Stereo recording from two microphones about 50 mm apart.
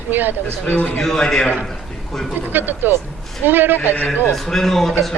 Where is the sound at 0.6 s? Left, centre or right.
Left.